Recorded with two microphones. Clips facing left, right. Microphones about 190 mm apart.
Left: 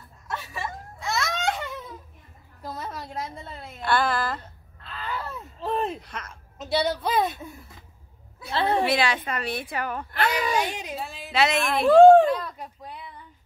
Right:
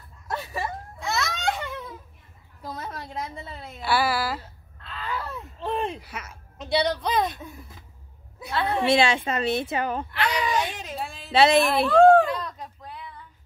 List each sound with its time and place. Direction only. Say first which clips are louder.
0.3 s a sound: right 3 dB; 35° right (ahead or behind)
1.0 s a sound: even; centre (ahead or behind)
6.6 s speech: right 1 dB; 5° left (ahead or behind)
8.5 s a woman's voice: left 2 dB; 30° left (ahead or behind)
8.8 s a woman's voice: right 3 dB; 25° right (ahead or behind)
10.1 s speech: left 3 dB; 45° left (ahead or behind)
10.5 s speech: left 1 dB; 10° left (ahead or behind)
11.3 s speech: right 5 dB; 30° right (ahead or behind)
12.3 s a sound: left 4 dB; 5° left (ahead or behind)